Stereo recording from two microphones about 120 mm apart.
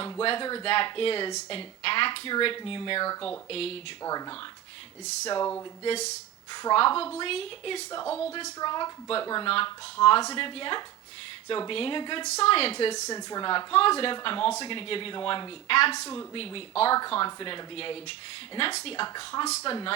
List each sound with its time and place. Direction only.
0.0 s speech: 50° left (ahead or behind)
4.0 s a woman's voice: 35° left (ahead or behind)
6.5 s a woman's voice: 35° left (ahead or behind)
6.7 s speech: 50° left (ahead or behind)
8.0 s speech: 15° left (ahead or behind)
8.5 s a woman's voice: 35° left (ahead or behind)
9.5 s speech: 50° left (ahead or behind)
12.4 s speech: 55° left (ahead or behind)
13.1 s speech: 30° left (ahead or behind); by 19.0 s 50° left (ahead or behind)
19.0 s a woman's voice: 40° left (ahead or behind)